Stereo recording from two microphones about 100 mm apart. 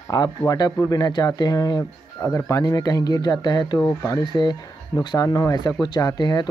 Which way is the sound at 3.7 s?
30° left (ahead or behind).